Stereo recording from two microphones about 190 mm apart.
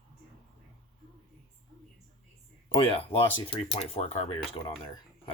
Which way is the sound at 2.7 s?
30° left (ahead or behind).